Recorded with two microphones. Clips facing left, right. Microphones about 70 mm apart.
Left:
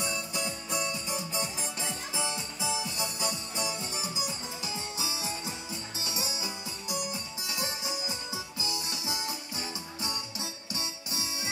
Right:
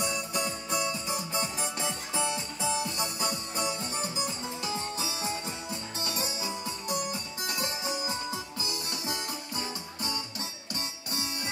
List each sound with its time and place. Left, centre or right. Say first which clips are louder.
0.3 s music: right 3 dB; right